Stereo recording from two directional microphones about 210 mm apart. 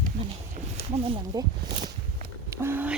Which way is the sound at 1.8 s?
35° right (ahead or behind).